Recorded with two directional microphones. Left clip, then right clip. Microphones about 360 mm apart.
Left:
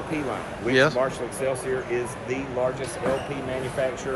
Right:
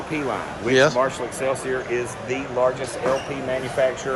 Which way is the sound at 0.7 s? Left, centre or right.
Centre.